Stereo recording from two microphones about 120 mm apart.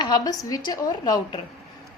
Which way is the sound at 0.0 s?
35° left (ahead or behind).